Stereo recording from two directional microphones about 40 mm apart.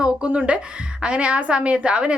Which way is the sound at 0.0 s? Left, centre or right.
Right.